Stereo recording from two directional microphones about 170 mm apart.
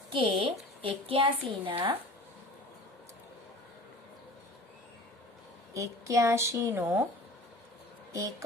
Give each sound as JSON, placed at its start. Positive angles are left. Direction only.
{"t": 0.1, "sound": "a woman's voice", "side_deg": -30}
{"t": 5.7, "sound": "a woman's voice", "side_deg": -20}
{"t": 8.1, "sound": "speech", "side_deg": -20}